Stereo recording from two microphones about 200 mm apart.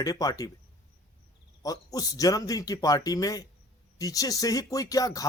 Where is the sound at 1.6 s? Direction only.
20° left (ahead or behind).